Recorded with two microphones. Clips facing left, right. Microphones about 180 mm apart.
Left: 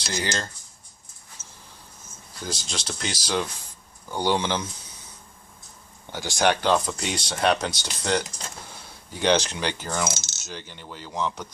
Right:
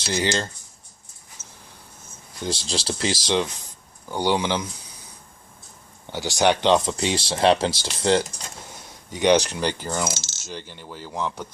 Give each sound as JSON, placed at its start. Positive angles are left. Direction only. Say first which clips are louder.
{"t": 0.0, "sound": "speech", "louder": "right 5 dB", "side_deg": -25}
{"t": 2.4, "sound": "speech", "louder": "right 6 dB", "side_deg": -30}
{"t": 4.1, "sound": "speech", "louder": "right 2 dB", "side_deg": -15}
{"t": 6.1, "sound": "speech", "louder": "right 2 dB", "side_deg": -15}
{"t": 9.2, "sound": "speech", "louder": "right 4 dB", "side_deg": -15}
{"t": 10.2, "sound": "coin", "louder": "right 3 dB", "side_deg": 15}
{"t": 10.7, "sound": "speech", "louder": "right 2 dB", "side_deg": -10}